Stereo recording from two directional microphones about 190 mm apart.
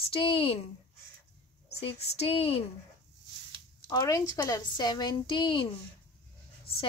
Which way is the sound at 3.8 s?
20° left (ahead or behind).